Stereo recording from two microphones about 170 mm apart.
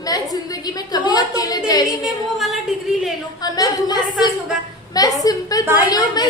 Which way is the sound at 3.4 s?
20° left (ahead or behind).